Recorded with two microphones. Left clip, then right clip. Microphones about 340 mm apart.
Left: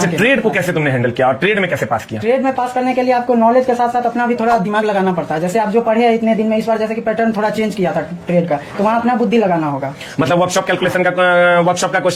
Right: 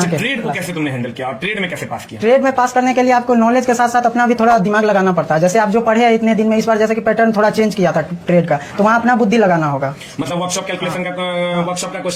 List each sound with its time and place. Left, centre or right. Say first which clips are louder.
0.0 s a man's voice: left 5 dB; left
2.2 s a man's voice: right 5 dB; right
10.2 s a man's voice: left 7 dB; left